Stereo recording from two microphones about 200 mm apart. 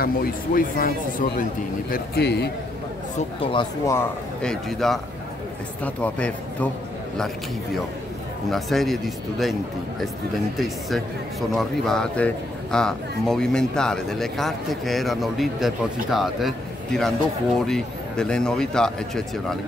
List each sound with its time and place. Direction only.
0.0 s speech: 45° left (ahead or behind)
3.5 s a man's voice: 15° left (ahead or behind)
4.4 s a man's voice: centre (ahead or behind)
8.5 s speech: centre (ahead or behind)
11.5 s speech: centre (ahead or behind)